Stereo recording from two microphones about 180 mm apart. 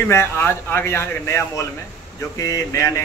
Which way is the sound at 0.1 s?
15° left (ahead or behind).